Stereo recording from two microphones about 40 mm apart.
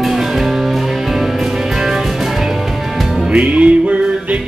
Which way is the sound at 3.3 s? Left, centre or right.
Right.